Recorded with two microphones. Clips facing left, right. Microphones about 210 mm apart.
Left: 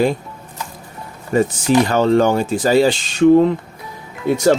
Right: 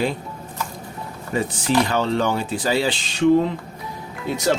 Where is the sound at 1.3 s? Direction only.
45° left (ahead or behind).